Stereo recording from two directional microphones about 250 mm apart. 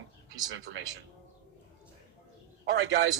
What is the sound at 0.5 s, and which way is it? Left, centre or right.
Speech, right.